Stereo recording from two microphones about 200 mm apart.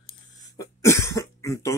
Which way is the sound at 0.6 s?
15° left (ahead or behind).